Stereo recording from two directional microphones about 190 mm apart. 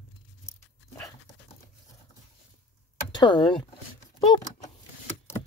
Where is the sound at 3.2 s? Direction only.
25° left (ahead or behind).